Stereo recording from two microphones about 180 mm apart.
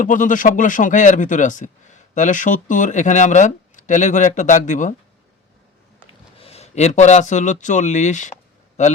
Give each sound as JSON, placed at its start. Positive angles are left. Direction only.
{"t": 0.0, "sound": "speech", "side_deg": 45}
{"t": 6.3, "sound": "speech", "side_deg": 35}